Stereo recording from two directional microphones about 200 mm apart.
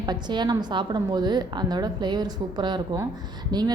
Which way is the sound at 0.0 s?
20° right (ahead or behind).